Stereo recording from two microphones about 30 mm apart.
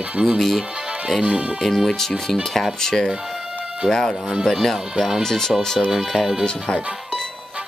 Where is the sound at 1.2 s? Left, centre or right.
Right.